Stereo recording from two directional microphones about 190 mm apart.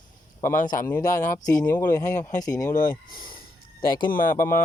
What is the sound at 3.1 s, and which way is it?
Speech, 50° left (ahead or behind).